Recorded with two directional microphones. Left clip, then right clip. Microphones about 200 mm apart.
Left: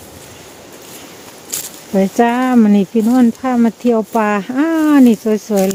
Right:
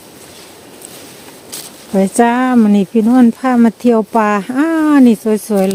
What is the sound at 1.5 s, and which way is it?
Speech, 15° right (ahead or behind).